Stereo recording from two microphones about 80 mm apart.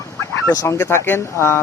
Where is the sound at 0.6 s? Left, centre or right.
Left.